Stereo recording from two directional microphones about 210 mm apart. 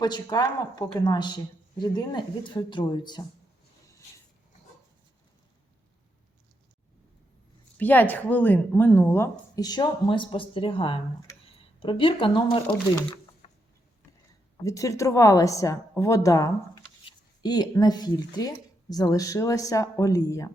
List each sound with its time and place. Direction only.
0.0 s speech: 20° left (ahead or behind)
7.8 s a woman's voice: 10° left (ahead or behind); by 12.6 s 25° left (ahead or behind)
13.0 s a sound: 25° left (ahead or behind)
14.6 s a woman's voice: 15° left (ahead or behind)